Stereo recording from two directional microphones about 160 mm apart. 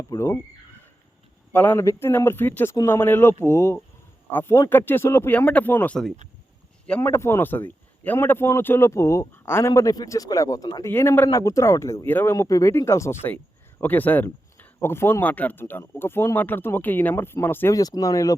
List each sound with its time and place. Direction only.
0.0 s speech: 20° left (ahead or behind)
1.5 s speech: 10° left (ahead or behind)